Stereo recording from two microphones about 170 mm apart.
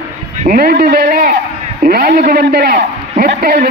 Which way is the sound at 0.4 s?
60° right (ahead or behind).